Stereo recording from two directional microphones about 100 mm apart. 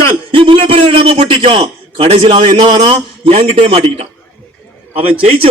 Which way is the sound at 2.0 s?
85° right.